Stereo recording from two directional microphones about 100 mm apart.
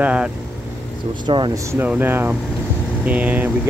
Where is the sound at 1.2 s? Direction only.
50° right (ahead or behind).